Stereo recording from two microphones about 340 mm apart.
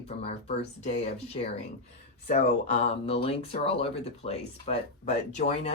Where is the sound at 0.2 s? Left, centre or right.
Centre.